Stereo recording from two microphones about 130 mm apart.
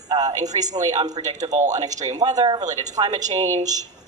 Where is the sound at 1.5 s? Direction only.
65° right (ahead or behind).